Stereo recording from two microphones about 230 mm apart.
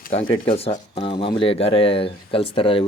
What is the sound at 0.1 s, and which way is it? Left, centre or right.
Speech, left.